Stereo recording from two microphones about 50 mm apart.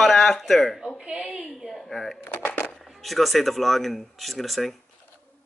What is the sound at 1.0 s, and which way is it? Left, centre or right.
Speech, centre.